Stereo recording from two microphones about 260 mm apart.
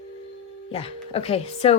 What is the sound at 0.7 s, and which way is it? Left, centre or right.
Speech, left.